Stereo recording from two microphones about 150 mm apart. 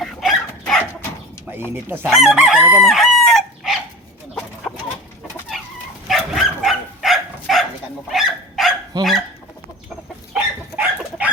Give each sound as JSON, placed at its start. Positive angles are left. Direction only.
{"t": 0.0, "sound": "dog", "side_deg": 0}
{"t": 1.7, "sound": "speech", "side_deg": -15}
{"t": 2.0, "sound": "chicken", "side_deg": 0}
{"t": 6.1, "sound": "dog", "side_deg": 0}
{"t": 8.9, "sound": "goose", "side_deg": -30}
{"t": 10.3, "sound": "dog", "side_deg": -10}